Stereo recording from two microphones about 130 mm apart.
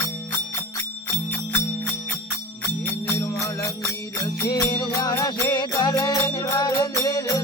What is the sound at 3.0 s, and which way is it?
Music, 25° left (ahead or behind).